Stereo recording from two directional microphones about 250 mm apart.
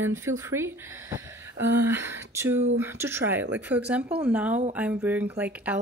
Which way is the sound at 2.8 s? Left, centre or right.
Centre.